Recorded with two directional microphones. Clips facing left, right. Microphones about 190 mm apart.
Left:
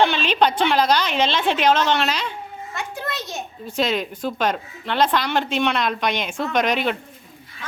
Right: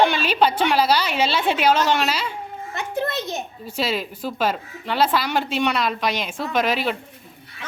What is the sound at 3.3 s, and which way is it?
A child's voice, 5° right (ahead or behind).